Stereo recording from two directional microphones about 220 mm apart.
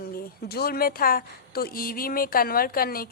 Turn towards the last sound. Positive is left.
turn(degrees=40)  # may be behind; listen again after turning